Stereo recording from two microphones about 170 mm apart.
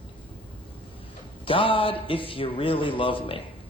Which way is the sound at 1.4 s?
30° left (ahead or behind).